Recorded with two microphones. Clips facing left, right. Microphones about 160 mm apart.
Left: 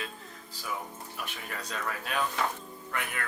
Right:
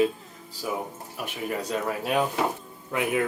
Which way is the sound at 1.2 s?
20° right (ahead or behind).